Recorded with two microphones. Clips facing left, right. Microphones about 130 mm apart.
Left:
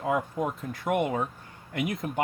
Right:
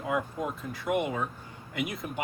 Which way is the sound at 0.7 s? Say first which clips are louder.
Left 2 dB; 45° left (ahead or behind).